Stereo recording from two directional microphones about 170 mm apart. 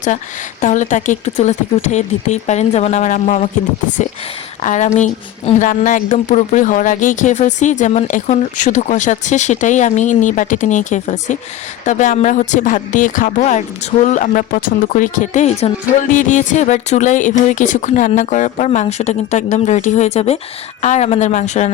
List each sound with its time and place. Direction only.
0.6 s a woman's voice: 45° left (ahead or behind)
4.6 s a woman's voice: 45° left (ahead or behind)